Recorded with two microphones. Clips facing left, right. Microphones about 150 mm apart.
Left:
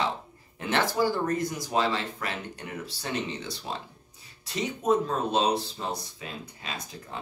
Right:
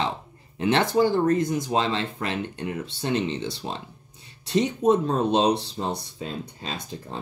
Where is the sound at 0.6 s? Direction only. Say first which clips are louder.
Right 5 dB; 20° right (ahead or behind).